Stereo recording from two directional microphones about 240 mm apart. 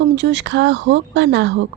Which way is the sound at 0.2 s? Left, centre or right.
Right.